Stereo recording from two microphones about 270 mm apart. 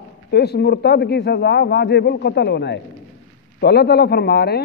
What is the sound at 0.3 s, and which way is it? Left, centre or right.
A man's voice, left.